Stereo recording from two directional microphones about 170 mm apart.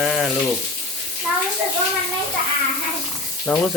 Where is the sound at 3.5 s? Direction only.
5° left (ahead or behind).